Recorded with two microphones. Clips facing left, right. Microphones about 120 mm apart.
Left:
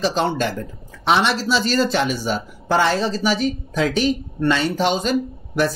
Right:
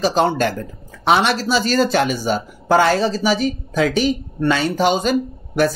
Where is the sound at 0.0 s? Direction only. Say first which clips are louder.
Right 3 dB; 45° right (ahead or behind).